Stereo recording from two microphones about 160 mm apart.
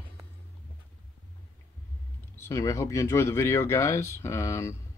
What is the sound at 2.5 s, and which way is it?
Speech, 20° left (ahead or behind).